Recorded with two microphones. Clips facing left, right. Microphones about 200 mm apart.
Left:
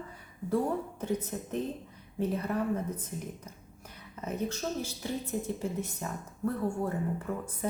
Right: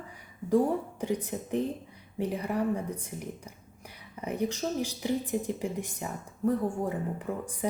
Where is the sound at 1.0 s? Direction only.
15° right (ahead or behind).